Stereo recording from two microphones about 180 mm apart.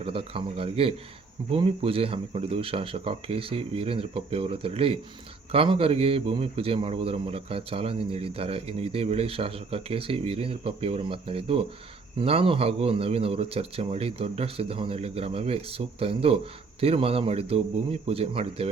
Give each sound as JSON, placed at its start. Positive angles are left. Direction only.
{"t": 0.0, "sound": "a man's voice", "side_deg": -30}